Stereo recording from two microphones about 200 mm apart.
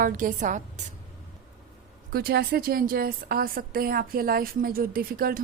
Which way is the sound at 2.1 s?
50° right (ahead or behind).